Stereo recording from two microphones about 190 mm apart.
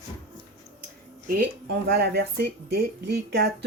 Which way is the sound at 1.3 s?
55° right (ahead or behind).